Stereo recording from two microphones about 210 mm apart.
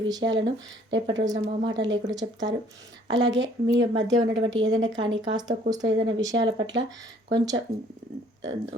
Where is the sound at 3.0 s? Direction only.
60° right (ahead or behind).